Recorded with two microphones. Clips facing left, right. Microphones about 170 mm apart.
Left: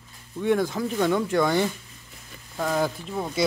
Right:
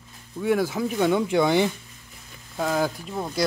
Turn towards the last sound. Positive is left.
turn(degrees=0)  # may be behind; listen again after turning